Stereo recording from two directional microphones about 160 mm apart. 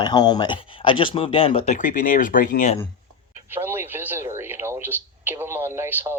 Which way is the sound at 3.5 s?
15° right (ahead or behind).